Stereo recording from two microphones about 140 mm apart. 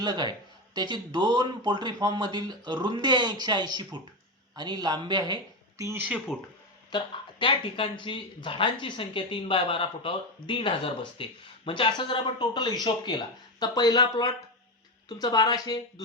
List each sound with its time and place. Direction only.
0.0 s speech: 30° right (ahead or behind)
6.3 s speech: 5° right (ahead or behind)
6.9 s speech: 35° left (ahead or behind)